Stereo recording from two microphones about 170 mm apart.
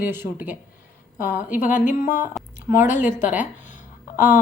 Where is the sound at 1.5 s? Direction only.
50° left (ahead or behind).